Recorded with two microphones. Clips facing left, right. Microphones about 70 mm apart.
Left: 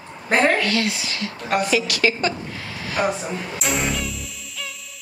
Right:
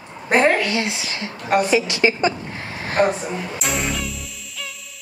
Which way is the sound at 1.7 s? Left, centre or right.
Right.